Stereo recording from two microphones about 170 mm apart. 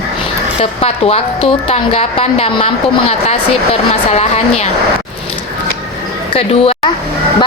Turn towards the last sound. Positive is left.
turn(degrees=35)  # may be behind; listen again after turning